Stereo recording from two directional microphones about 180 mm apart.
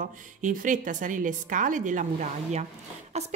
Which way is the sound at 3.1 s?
40° right (ahead or behind).